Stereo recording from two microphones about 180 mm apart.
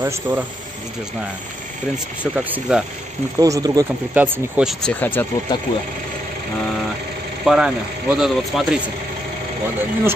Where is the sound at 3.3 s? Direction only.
20° right (ahead or behind).